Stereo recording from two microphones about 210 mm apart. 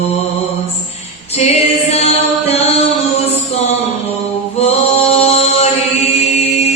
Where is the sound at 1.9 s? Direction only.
30° left (ahead or behind).